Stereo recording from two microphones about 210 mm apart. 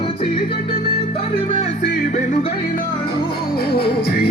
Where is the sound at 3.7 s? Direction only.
50° left (ahead or behind).